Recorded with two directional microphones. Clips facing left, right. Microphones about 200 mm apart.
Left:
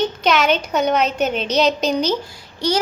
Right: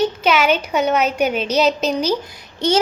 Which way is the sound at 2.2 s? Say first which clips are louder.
Right 2 dB; 25° right (ahead or behind).